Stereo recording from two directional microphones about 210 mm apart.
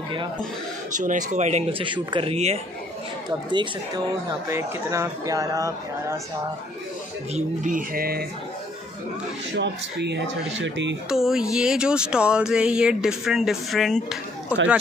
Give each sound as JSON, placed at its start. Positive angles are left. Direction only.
{"t": 0.9, "sound": "speech", "side_deg": -35}
{"t": 7.3, "sound": "speech", "side_deg": -40}
{"t": 9.5, "sound": "speech", "side_deg": -55}
{"t": 11.1, "sound": "speech", "side_deg": 0}